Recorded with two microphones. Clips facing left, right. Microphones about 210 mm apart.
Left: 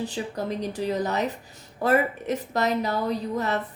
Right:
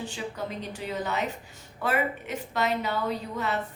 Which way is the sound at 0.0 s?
35° left (ahead or behind).